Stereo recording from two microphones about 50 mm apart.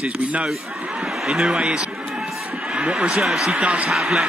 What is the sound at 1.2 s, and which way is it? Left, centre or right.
Speech, centre.